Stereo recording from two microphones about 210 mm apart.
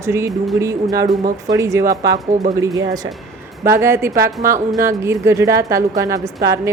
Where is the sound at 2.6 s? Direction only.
15° right (ahead or behind).